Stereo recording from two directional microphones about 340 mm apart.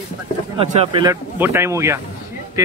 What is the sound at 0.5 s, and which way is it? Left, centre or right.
Speech, centre.